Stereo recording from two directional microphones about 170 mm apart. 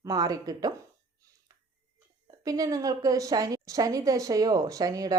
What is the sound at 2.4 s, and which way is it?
A woman's voice, 20° right (ahead or behind).